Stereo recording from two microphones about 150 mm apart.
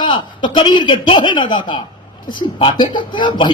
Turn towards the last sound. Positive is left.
turn(degrees=30)  # may be behind; listen again after turning